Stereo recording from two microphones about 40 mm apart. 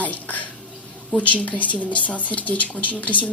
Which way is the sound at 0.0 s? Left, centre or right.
Left.